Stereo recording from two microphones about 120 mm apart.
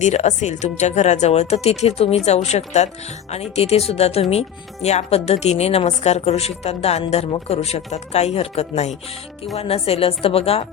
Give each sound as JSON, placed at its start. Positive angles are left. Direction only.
{"t": 0.0, "sound": "speech", "side_deg": 70}